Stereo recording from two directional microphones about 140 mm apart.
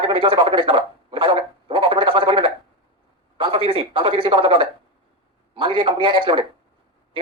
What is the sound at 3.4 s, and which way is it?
Speech, 40° right (ahead or behind).